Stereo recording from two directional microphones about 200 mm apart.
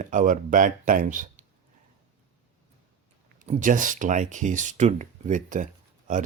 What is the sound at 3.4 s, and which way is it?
Speech, 40° right (ahead or behind).